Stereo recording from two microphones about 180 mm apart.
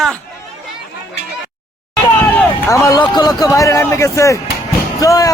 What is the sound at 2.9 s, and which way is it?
Speech, 20° left (ahead or behind).